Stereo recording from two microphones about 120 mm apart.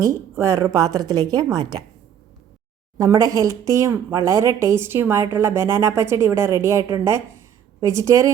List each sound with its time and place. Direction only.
0.0 s speech: 25° right (ahead or behind)
3.0 s speech: 30° right (ahead or behind)